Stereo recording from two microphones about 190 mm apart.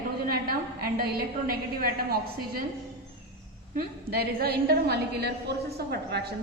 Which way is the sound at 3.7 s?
55° right (ahead or behind).